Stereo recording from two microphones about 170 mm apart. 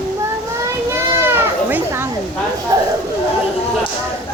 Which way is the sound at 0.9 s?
15° right (ahead or behind).